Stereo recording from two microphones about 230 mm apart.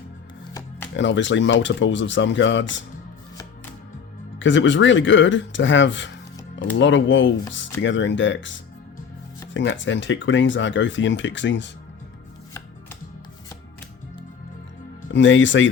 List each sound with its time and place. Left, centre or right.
0.9 s speech: left
4.4 s speech: left
15.1 s speech: left